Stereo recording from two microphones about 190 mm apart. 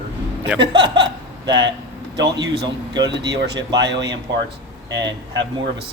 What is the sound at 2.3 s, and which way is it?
Speech, 65° right (ahead or behind).